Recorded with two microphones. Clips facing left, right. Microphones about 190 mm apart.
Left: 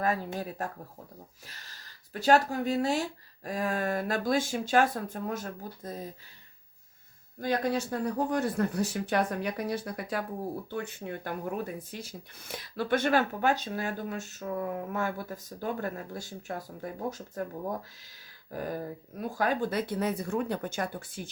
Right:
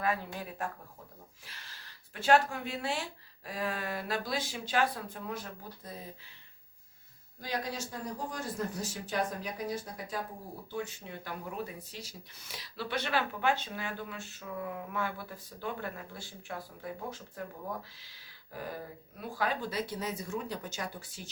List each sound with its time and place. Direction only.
0.0 s speech: 45° left (ahead or behind)
7.4 s speech: 55° left (ahead or behind)
10.7 s speech: 55° left (ahead or behind)